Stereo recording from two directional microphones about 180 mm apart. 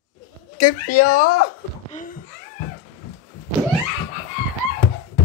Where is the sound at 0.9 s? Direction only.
55° left (ahead or behind).